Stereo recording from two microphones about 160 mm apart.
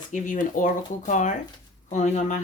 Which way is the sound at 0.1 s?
55° left (ahead or behind).